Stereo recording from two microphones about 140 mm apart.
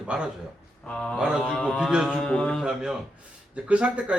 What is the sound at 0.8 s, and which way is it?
Speech, 5° left (ahead or behind).